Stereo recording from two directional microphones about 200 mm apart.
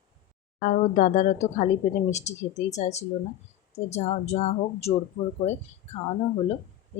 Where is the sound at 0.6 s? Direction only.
40° left (ahead or behind).